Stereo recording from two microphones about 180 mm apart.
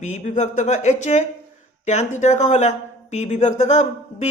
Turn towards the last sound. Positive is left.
turn(degrees=40)  # may be behind; listen again after turning